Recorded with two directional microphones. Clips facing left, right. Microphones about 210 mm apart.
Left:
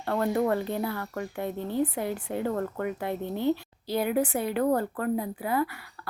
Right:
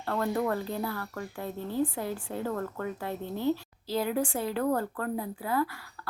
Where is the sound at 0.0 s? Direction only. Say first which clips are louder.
Left 3 dB; 20° left (ahead or behind).